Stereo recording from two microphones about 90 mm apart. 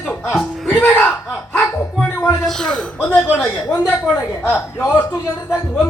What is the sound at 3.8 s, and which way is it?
Speech, 30° left (ahead or behind).